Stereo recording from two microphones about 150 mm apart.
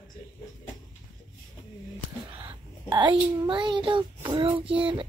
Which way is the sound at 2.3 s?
30° right (ahead or behind).